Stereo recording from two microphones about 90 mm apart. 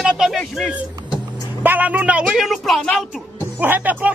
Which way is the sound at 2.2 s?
Centre (ahead or behind).